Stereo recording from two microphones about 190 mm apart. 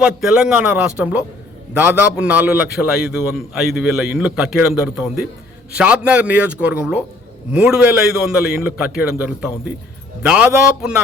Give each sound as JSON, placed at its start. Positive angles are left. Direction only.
{"t": 0.0, "sound": "a man's voice", "side_deg": -5}